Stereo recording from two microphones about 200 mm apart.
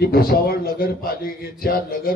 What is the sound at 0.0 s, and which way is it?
A man's voice, 50° left (ahead or behind).